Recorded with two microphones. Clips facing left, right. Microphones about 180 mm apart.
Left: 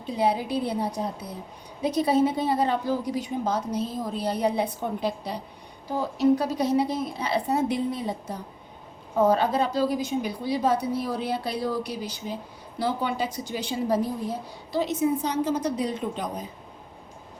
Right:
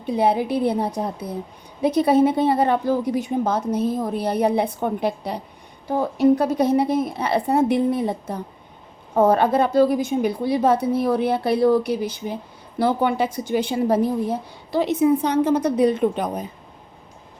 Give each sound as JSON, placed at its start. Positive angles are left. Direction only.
{"t": 0.0, "sound": "a woman's voice", "side_deg": -60}